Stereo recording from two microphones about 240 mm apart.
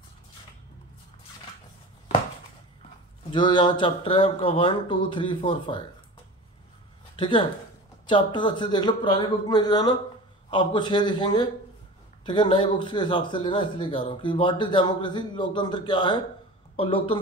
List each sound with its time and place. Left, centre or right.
3.3 s speech: centre
7.2 s speech: centre